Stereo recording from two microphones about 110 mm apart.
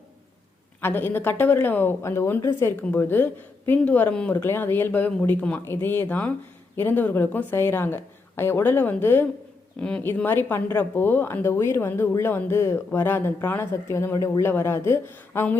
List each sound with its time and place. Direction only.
0.8 s speech: 20° left (ahead or behind)
9.8 s speech: 10° left (ahead or behind)
10.2 s speech: 20° left (ahead or behind)